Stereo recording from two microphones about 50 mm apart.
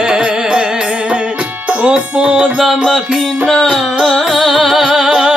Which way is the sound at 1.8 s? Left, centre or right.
Right.